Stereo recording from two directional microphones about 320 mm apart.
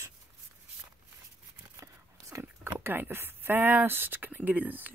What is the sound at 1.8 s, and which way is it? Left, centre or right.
Speech, centre.